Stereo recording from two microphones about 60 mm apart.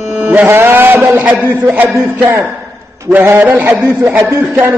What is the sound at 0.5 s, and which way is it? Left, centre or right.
Speech, right.